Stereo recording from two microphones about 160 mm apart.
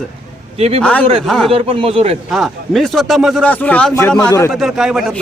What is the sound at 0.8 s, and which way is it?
Speech, 10° left (ahead or behind).